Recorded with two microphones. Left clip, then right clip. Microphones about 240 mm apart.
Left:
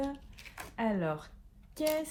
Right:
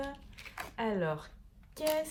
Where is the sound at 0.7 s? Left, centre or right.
Right.